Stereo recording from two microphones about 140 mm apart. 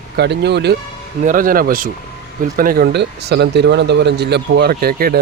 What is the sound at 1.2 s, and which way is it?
Speech, 75° right (ahead or behind).